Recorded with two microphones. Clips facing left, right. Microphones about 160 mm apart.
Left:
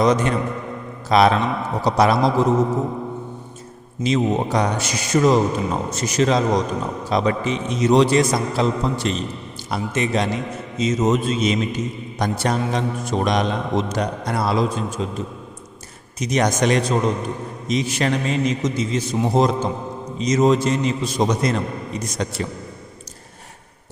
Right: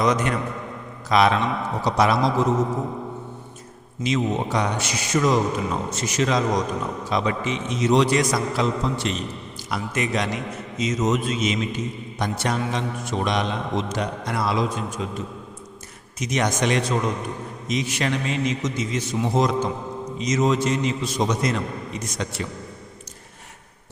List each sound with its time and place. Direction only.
0.0 s a man's voice: 30° left (ahead or behind)
4.0 s a man's voice: 35° left (ahead or behind)